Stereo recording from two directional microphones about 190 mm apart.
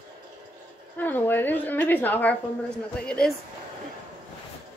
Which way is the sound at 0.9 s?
10° left (ahead or behind).